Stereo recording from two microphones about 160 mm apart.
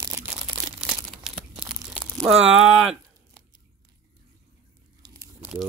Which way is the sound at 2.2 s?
5° right (ahead or behind).